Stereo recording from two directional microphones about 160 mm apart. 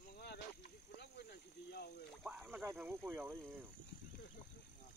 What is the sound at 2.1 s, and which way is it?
Speech, 5° right (ahead or behind).